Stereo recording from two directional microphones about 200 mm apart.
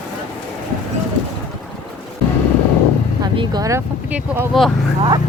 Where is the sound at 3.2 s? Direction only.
20° right (ahead or behind).